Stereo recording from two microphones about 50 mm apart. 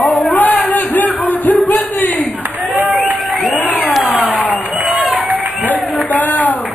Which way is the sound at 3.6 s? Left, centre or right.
Left.